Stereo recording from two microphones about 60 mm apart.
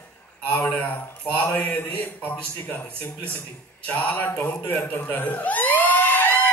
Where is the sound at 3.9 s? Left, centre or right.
Left.